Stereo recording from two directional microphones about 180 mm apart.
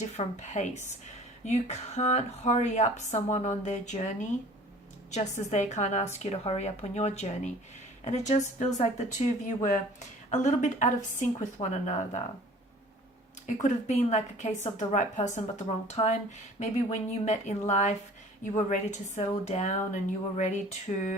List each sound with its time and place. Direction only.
0.2 s a woman's voice: 40° left (ahead or behind)
13.6 s speech: 40° left (ahead or behind)